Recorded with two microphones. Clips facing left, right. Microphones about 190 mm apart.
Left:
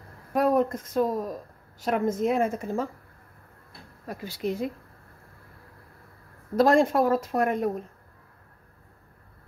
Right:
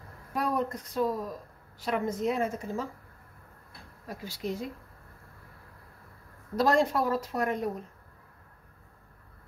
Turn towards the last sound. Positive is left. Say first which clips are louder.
# left 5 dB
turn(degrees=50)  # may be behind; listen again after turning